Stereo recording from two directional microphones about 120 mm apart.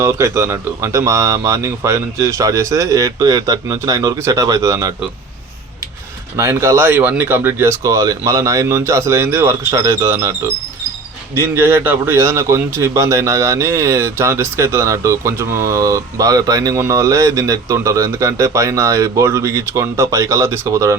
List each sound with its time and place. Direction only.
0.0 s a man's voice: 25° right (ahead or behind)
6.3 s a man's voice: 25° right (ahead or behind)